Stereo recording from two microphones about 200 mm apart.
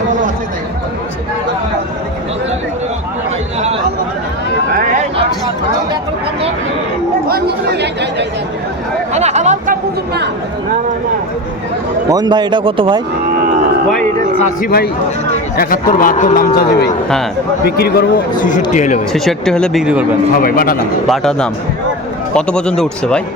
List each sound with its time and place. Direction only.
7.3 s chatter: 50° right (ahead or behind)
9.1 s chatter: 35° right (ahead or behind)
12.0 s a man's voice: 20° right (ahead or behind)
14.3 s speech: 40° left (ahead or behind)
16.6 s speech: 55° left (ahead or behind); by 18.9 s 35° left (ahead or behind)
19.1 s speech: centre (ahead or behind)
20.4 s speech: 45° left (ahead or behind)
21.1 s speech: 5° left (ahead or behind)